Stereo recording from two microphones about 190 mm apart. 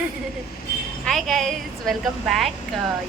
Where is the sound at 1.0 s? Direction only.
Centre (ahead or behind).